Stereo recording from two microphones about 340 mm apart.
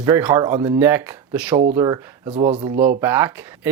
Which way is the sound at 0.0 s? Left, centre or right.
Centre.